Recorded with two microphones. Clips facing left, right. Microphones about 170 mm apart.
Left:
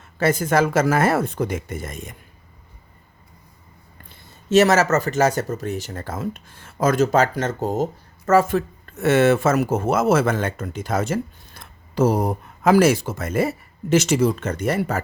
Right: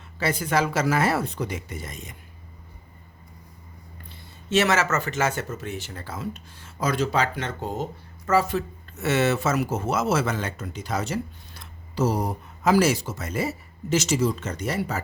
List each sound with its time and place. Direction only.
0.2 s speech: 45° left (ahead or behind)
4.4 s speech: 40° left (ahead or behind)